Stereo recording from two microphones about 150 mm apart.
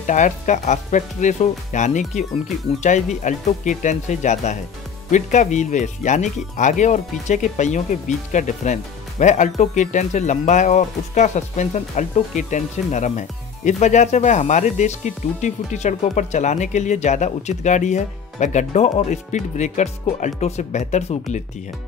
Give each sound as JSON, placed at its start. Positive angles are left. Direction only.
{"t": 0.0, "sound": "speech", "side_deg": 55}